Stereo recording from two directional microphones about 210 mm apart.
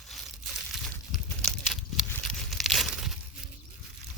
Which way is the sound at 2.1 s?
Centre (ahead or behind).